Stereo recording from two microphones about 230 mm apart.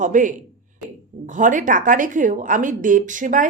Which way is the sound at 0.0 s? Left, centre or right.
Right.